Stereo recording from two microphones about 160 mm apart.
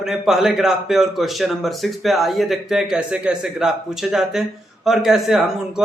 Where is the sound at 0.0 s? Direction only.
5° right (ahead or behind).